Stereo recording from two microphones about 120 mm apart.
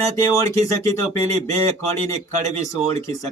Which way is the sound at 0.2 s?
25° left (ahead or behind).